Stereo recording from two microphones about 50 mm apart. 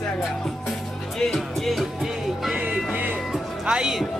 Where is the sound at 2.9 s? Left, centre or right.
Right.